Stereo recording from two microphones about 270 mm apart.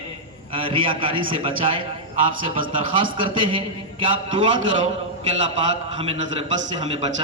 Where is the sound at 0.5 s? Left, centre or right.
Centre.